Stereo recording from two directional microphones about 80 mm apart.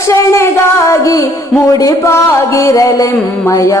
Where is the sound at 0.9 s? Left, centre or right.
Left.